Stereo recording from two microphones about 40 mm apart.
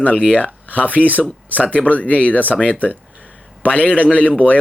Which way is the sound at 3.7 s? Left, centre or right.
Left.